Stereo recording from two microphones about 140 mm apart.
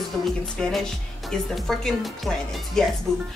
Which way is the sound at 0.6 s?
5° left (ahead or behind).